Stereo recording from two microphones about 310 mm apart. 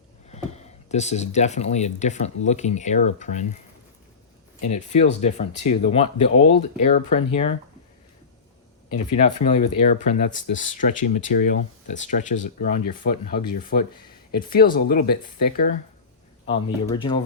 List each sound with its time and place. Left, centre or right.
0.3 s speech: left
4.6 s speech: left
8.9 s speech: left
16.5 s speech: centre